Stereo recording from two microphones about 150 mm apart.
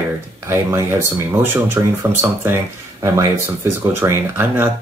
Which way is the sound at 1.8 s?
15° right (ahead or behind).